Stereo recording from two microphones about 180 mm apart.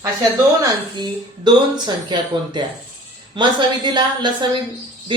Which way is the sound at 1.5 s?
25° right (ahead or behind).